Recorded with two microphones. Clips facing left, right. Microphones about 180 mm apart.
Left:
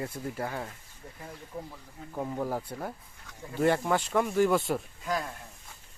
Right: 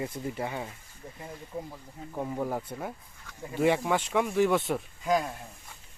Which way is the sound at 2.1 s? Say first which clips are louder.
Even; centre (ahead or behind).